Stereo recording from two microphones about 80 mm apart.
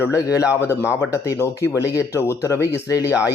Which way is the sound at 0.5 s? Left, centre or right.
Left.